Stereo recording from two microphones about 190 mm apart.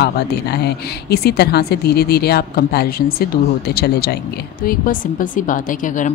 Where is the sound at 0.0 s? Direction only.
60° left (ahead or behind).